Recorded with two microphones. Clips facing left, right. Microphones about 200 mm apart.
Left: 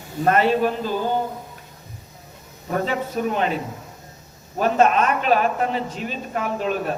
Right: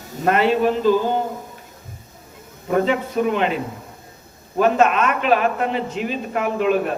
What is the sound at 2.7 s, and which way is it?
Speech, 40° left (ahead or behind).